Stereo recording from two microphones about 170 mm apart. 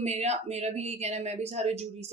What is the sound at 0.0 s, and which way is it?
Speech, 40° right (ahead or behind).